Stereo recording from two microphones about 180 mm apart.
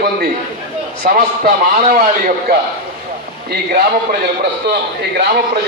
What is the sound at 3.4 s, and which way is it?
Speech, 60° right (ahead or behind).